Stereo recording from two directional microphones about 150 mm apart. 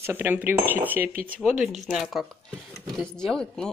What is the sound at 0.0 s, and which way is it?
Speech, 15° right (ahead or behind).